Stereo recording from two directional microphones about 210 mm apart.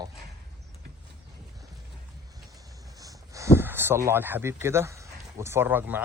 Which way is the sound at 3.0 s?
15° right (ahead or behind).